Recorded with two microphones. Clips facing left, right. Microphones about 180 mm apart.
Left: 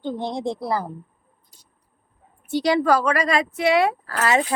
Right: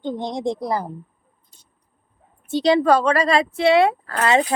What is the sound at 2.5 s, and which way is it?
A woman's voice, 25° right (ahead or behind).